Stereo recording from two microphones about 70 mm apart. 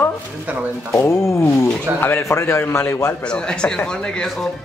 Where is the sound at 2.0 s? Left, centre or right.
Left.